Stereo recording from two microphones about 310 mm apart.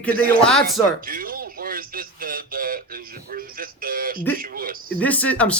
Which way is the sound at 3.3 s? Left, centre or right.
Right.